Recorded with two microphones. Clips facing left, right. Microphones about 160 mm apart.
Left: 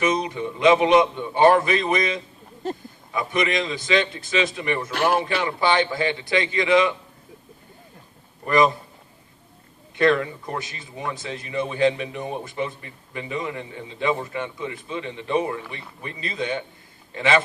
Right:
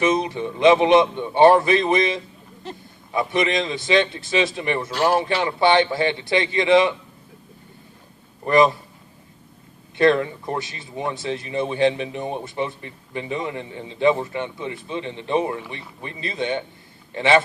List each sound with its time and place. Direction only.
0.0 s a man's voice: 30° right (ahead or behind)
2.6 s speech: 45° left (ahead or behind)
3.1 s a man's voice: 30° right (ahead or behind)
8.4 s a man's voice: 30° right (ahead or behind)
10.0 s a man's voice: 30° right (ahead or behind)